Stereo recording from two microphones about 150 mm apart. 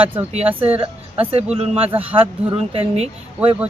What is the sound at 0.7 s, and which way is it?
Speech, 40° right (ahead or behind).